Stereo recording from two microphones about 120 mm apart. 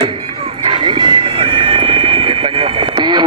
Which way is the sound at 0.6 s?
40° right (ahead or behind).